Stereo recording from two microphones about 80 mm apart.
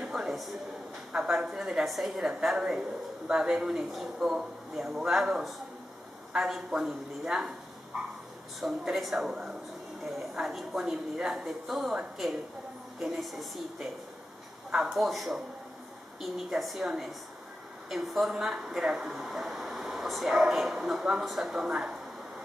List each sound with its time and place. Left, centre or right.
0.0 s a sound: centre
1.1 s a woman's voice: centre
6.3 s a woman's voice: centre
8.5 s a woman's voice: centre